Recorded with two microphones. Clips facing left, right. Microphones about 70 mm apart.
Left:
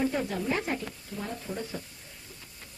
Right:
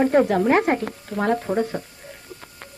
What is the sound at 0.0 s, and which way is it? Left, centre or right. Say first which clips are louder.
Speech: right 12 dB; right.